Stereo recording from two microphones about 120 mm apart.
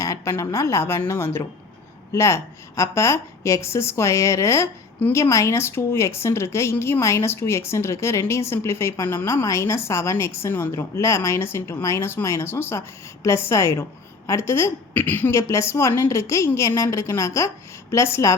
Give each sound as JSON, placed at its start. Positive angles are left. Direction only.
{"t": 0.0, "sound": "a woman's voice", "side_deg": 25}